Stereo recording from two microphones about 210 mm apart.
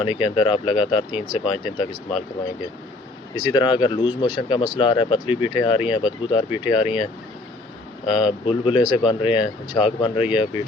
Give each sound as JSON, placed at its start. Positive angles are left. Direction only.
{"t": 0.0, "sound": "speech", "side_deg": 25}
{"t": 3.3, "sound": "speech", "side_deg": 20}